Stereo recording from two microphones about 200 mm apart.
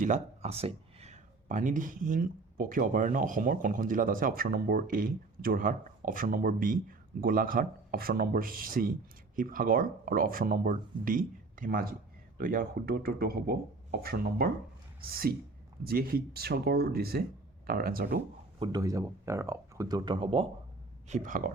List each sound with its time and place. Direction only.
0.0 s speech: 35° right (ahead or behind)
15.9 s speech: 45° right (ahead or behind)
18.6 s speech: 20° right (ahead or behind)
21.1 s speech: 40° right (ahead or behind)